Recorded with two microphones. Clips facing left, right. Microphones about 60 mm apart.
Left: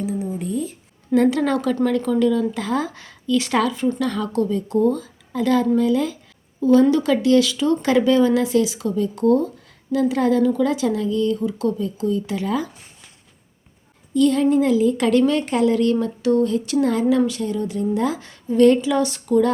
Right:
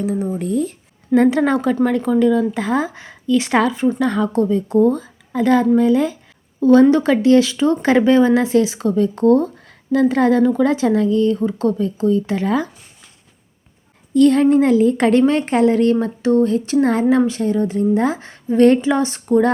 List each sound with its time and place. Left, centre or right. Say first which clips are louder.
0.0 s speech: right 4 dB; right
1.1 s a woman's voice: right 3 dB; right
6.6 s a woman's voice: right 4 dB; right
6.8 s speech: right 4 dB; right
14.1 s speech: right 5 dB; right